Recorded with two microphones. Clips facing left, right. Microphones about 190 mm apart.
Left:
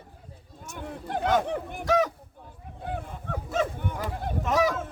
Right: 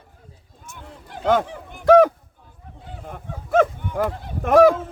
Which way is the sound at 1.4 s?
60° left (ahead or behind).